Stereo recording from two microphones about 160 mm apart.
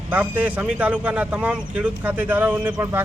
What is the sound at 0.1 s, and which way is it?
Speech, 10° right (ahead or behind).